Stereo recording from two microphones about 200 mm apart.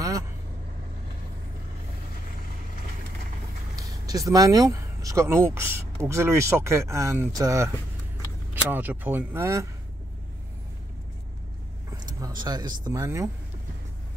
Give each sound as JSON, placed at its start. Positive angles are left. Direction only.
{"t": 3.7, "sound": "speech", "side_deg": -20}
{"t": 12.2, "sound": "speech", "side_deg": -20}